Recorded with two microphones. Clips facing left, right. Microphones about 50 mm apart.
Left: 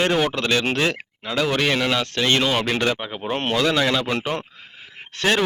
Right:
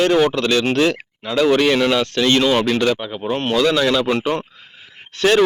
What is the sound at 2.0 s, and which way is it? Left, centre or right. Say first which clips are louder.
Speech: right 4 dB; centre.